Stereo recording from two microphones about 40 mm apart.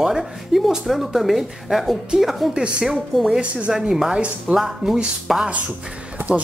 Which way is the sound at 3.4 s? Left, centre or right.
Right.